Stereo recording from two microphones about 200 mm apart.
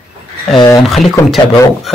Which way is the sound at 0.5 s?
20° left (ahead or behind).